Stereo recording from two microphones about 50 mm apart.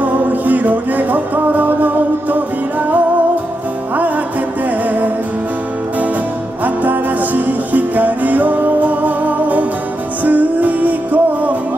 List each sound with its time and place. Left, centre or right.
0.0 s music: right
4.6 s music: right
6.6 s music: right